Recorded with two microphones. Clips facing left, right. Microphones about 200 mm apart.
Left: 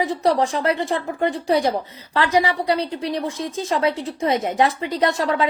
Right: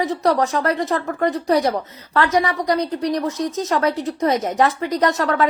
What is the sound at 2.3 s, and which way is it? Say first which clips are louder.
A woman's voice: left 3 dB; 30° left (ahead or behind).